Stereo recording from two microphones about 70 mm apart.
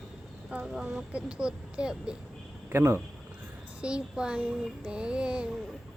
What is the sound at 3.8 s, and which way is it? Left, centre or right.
Speech, centre.